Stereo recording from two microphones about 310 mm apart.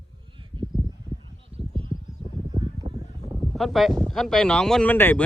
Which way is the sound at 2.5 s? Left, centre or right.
Centre.